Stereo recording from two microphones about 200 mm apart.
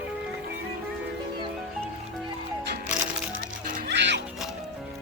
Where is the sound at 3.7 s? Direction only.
55° right (ahead or behind).